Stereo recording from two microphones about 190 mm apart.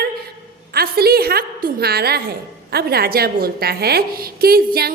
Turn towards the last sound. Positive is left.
turn(degrees=-55)  # may be behind; listen again after turning